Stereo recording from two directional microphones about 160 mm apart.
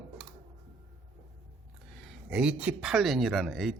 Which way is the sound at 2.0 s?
5° right (ahead or behind).